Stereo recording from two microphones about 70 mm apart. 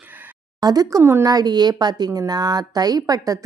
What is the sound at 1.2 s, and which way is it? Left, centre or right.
A woman's voice, right.